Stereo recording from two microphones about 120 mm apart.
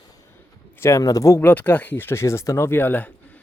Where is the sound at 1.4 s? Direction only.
15° left (ahead or behind).